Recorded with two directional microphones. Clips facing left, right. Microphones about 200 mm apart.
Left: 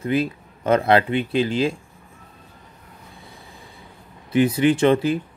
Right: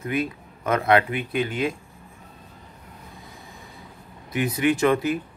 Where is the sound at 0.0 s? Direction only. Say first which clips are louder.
Left 4 dB; 30° left (ahead or behind).